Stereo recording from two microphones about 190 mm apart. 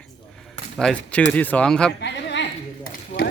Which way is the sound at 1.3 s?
10° left (ahead or behind).